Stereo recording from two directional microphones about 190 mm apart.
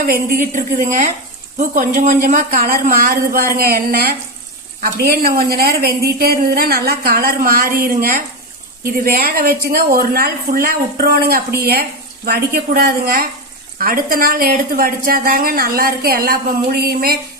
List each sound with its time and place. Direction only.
0.0 s speech: 50° right (ahead or behind)